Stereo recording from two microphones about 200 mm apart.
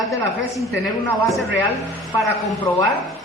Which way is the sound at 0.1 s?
15° left (ahead or behind).